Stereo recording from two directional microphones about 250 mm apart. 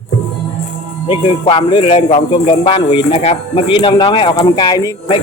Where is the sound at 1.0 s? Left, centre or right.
Centre.